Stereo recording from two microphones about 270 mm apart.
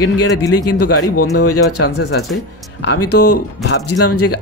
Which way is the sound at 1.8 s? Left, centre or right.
Left.